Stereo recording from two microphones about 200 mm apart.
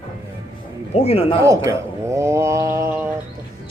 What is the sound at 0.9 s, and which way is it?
Speech, 30° left (ahead or behind).